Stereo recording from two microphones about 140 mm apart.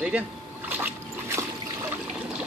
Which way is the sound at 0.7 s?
15° right (ahead or behind).